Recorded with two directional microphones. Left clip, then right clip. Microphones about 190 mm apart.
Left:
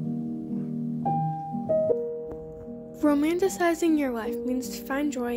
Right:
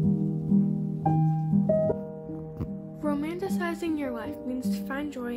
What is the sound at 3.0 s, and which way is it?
Speech, 30° left (ahead or behind).